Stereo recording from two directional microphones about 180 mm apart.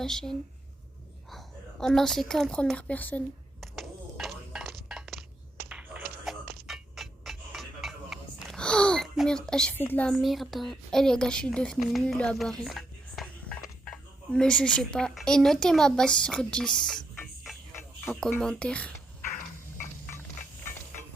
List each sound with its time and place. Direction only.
0.0 s speech: 5° left (ahead or behind)
1.3 s a sound: centre (ahead or behind)
6.4 s music: 60° right (ahead or behind)
6.7 s music: centre (ahead or behind)
18.0 s speech: centre (ahead or behind)